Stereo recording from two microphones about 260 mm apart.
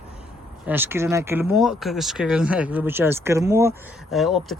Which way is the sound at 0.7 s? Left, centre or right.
Centre.